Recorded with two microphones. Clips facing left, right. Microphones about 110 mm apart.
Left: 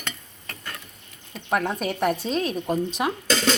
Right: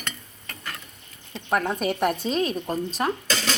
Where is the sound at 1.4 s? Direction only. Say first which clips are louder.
Right 1 dB; centre (ahead or behind).